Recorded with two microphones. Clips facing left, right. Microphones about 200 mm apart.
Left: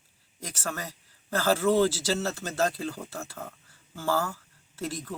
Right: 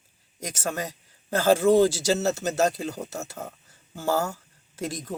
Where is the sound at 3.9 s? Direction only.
15° right (ahead or behind).